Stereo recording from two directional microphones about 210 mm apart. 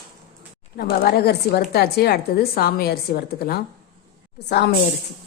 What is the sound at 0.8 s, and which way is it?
A woman's voice, 45° left (ahead or behind).